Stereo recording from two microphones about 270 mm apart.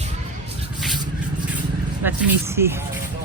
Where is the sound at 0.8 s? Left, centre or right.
Centre.